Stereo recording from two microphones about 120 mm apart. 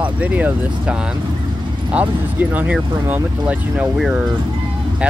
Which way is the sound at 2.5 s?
10° right (ahead or behind).